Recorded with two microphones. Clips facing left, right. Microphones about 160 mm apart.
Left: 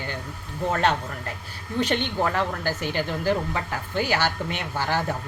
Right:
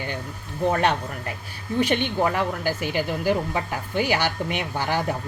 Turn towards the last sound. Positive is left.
turn(degrees=-15)  # may be behind; listen again after turning